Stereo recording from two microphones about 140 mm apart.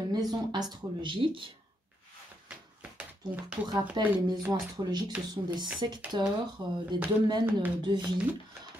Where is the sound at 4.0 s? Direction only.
35° right (ahead or behind).